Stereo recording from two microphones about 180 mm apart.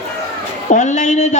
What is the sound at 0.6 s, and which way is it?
Speech, 40° left (ahead or behind).